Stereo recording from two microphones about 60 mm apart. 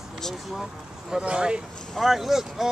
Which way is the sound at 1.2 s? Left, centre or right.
Centre.